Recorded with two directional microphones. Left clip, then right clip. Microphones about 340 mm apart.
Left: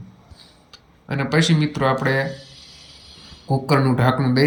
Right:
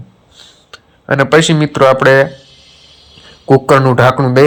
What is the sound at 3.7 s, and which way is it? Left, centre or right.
Speech, right.